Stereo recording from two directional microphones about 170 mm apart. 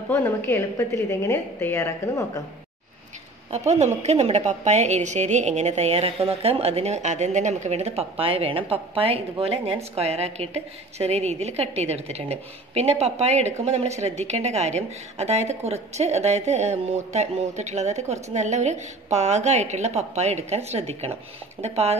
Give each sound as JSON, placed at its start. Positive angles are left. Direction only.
{"t": 0.1, "sound": "a woman's voice", "side_deg": 15}
{"t": 3.5, "sound": "a woman's voice", "side_deg": -40}